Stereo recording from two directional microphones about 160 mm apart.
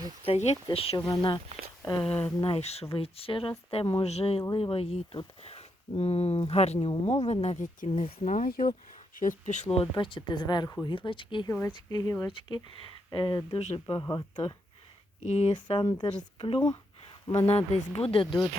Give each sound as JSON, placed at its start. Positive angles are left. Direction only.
{"t": 0.3, "sound": "speech", "side_deg": 40}
{"t": 2.0, "sound": "speech", "side_deg": 10}
{"t": 2.4, "sound": "speech", "side_deg": 40}
{"t": 7.9, "sound": "speech", "side_deg": 35}
{"t": 8.3, "sound": "speech", "side_deg": 60}
{"t": 15.3, "sound": "speech", "side_deg": 40}
{"t": 15.5, "sound": "speech", "side_deg": 30}
{"t": 17.7, "sound": "speech", "side_deg": 40}